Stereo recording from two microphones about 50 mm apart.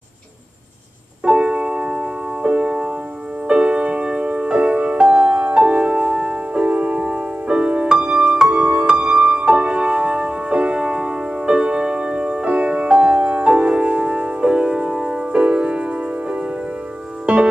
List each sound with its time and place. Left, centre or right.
1.2 s music: right
8.5 s music: right